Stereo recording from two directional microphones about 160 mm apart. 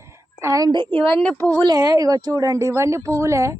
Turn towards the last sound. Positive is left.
turn(degrees=-20)  # may be behind; listen again after turning